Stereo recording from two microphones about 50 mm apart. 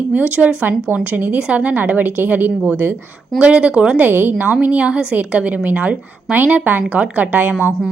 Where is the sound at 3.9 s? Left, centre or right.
Right.